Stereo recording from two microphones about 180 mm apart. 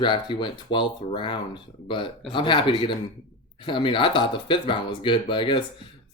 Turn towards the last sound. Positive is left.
turn(degrees=30)  # may be behind; listen again after turning